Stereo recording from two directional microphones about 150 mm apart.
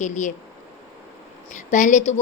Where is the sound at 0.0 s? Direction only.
55° left (ahead or behind).